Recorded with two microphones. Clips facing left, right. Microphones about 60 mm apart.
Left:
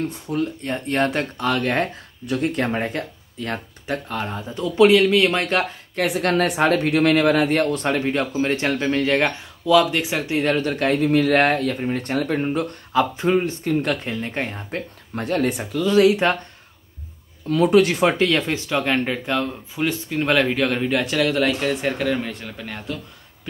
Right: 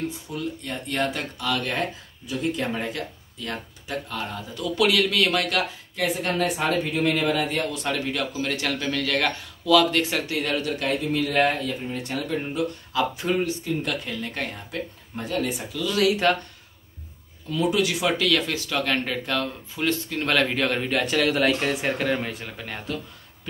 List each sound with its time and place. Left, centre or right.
0.1 s speech: left
2.2 s speech: left
6.0 s speech: left; by 10.2 s centre
10.2 s speech: left
10.7 s speech: left
15.1 s speech: left
15.8 s speech: left
17.5 s speech: left; by 22.9 s centre